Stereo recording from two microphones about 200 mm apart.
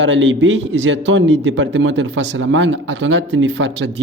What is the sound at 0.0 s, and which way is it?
A man's voice, 65° right (ahead or behind).